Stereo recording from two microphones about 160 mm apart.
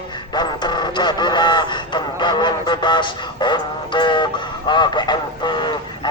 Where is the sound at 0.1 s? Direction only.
25° left (ahead or behind).